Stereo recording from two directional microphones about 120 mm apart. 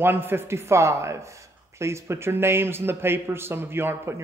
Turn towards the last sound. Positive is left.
turn(degrees=-20)  # may be behind; listen again after turning